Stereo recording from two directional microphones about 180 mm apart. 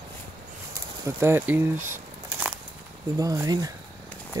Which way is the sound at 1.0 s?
15° right (ahead or behind).